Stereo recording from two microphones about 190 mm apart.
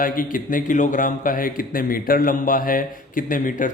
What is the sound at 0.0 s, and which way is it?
A man's voice, 45° left (ahead or behind).